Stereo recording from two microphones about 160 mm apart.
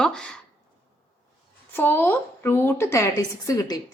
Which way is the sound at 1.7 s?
15° left (ahead or behind).